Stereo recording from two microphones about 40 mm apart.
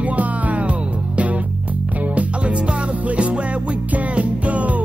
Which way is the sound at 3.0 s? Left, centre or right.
Right.